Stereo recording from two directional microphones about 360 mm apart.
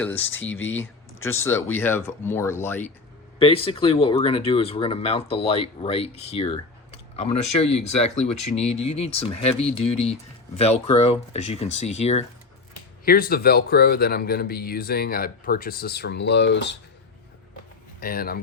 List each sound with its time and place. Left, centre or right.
0.0 s speech: centre
0.8 s a sound: centre
1.7 s speech: centre; by 16.7 s left
18.0 s speech: left